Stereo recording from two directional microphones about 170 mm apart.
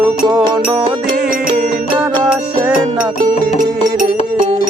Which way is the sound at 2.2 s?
5° right (ahead or behind).